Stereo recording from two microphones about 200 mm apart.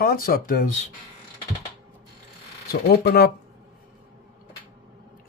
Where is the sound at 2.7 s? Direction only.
55° left (ahead or behind).